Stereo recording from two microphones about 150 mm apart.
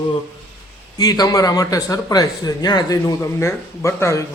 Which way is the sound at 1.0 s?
25° left (ahead or behind).